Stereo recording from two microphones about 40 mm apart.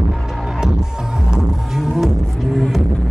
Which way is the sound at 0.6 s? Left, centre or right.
Centre.